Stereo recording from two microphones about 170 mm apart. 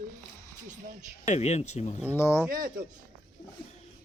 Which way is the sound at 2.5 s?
55° right (ahead or behind).